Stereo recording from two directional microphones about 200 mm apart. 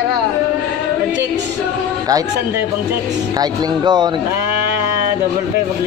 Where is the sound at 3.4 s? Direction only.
20° right (ahead or behind).